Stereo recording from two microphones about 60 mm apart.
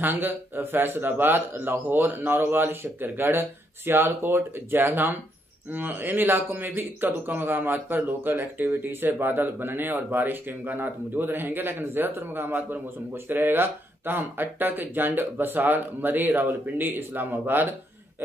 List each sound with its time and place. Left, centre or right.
0.0 s speech: right